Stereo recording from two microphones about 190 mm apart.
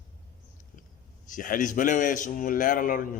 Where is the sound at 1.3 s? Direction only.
45° left (ahead or behind).